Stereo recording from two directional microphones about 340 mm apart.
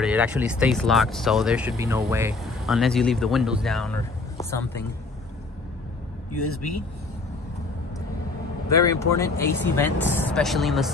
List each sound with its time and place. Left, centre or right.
0.0 s speech: centre
8.7 s speech: centre